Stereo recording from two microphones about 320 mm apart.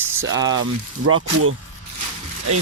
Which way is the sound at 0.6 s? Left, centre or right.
Right.